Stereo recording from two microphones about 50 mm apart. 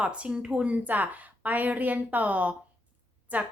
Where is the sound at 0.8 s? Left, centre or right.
Right.